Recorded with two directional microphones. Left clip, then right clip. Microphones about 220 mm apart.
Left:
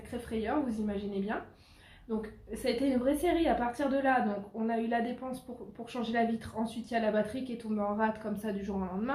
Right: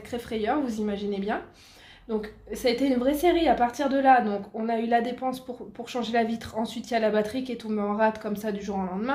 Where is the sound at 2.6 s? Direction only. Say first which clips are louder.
Right 6 dB; 40° right (ahead or behind).